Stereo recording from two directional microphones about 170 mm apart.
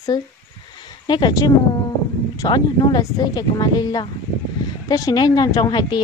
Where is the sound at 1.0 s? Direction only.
25° left (ahead or behind).